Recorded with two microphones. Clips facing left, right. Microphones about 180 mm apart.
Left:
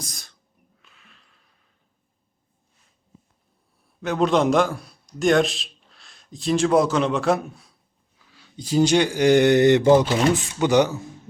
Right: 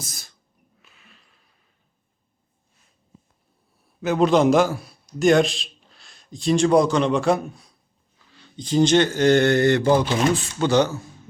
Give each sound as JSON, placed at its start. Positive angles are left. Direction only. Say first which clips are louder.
{"t": 0.0, "sound": "sneeze", "louder": "left 1 dB", "side_deg": -5}
{"t": 0.8, "sound": "a sound", "louder": "right 2 dB", "side_deg": -5}
{"t": 4.0, "sound": "a man's voice", "louder": "right 2 dB", "side_deg": 0}